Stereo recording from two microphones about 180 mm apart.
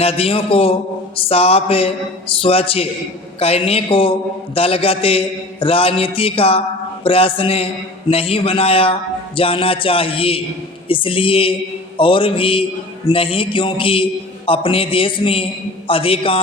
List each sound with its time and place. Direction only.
0.0 s a man's voice: 35° left (ahead or behind)